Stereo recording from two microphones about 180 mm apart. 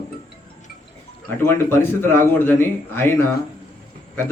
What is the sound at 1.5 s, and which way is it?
A man's voice, 10° left (ahead or behind).